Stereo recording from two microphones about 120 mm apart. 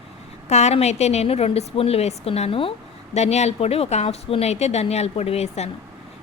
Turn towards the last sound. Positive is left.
turn(degrees=60)  # may be behind; listen again after turning